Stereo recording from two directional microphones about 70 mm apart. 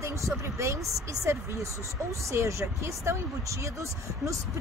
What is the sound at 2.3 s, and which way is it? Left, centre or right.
Speech, right.